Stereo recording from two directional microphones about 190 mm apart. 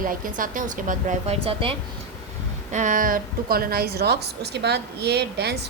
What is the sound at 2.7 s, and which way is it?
A woman's voice, 45° right (ahead or behind).